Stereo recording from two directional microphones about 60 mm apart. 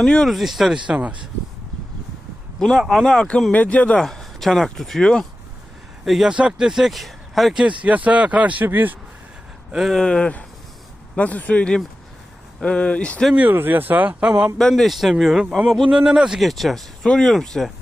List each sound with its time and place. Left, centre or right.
0.0 s speech: centre
0.3 s speech: centre
2.6 s speech: centre
3.1 s speech: centre
3.5 s speech: left
4.0 s speech: centre
6.3 s speech: centre
7.6 s speech: right
9.9 s speech: centre
13.5 s speech: right
14.2 s speech: centre
14.6 s speech: centre
16.5 s speech: centre